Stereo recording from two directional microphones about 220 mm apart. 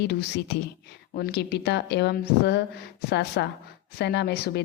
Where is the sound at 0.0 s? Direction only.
50° left (ahead or behind).